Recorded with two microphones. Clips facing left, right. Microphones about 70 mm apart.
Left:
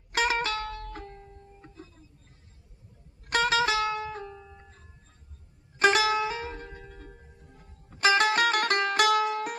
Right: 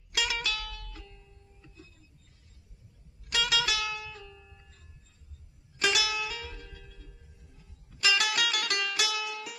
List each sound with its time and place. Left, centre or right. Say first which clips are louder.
0.1 s music: left 6 dB; left
3.2 s music: left 6 dB; left